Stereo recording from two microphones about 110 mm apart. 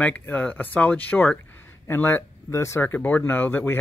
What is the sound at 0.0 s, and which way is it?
Speech, 15° left (ahead or behind).